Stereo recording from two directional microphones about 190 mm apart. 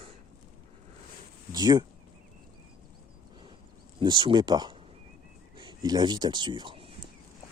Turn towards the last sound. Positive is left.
turn(degrees=-30)  # may be behind; listen again after turning